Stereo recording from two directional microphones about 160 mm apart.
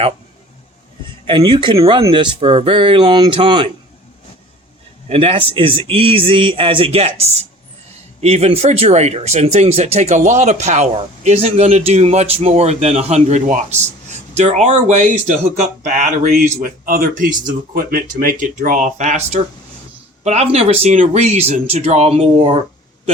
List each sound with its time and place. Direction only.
1.3 s speech: 30° right (ahead or behind)
5.0 s speech: 35° right (ahead or behind)
16.6 s speech: 65° right (ahead or behind); by 22.5 s 40° right (ahead or behind)